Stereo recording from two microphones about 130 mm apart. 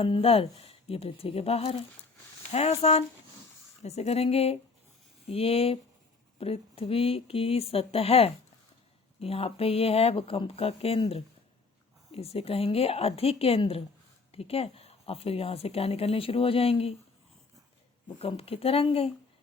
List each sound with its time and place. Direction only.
0.0 s a woman's voice: 45° left (ahead or behind)
18.2 s a woman's voice: 50° left (ahead or behind)